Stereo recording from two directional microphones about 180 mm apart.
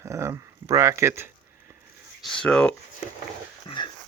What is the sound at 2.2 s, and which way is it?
Speech, 5° left (ahead or behind).